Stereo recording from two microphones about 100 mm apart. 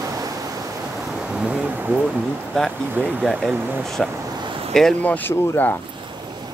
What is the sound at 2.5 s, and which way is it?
Speech, 10° left (ahead or behind).